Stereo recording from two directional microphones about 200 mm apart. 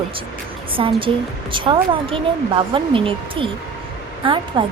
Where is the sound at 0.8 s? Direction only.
25° right (ahead or behind).